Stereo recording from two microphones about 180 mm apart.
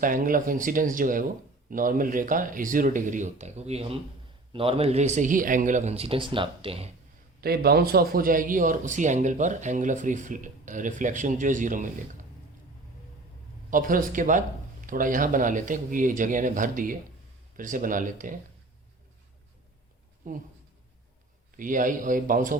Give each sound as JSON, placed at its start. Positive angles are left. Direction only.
{"t": 0.0, "sound": "speech", "side_deg": -50}
{"t": 7.4, "sound": "speech", "side_deg": -60}
{"t": 13.7, "sound": "speech", "side_deg": -50}
{"t": 20.2, "sound": "speech", "side_deg": -50}
{"t": 21.5, "sound": "speech", "side_deg": -50}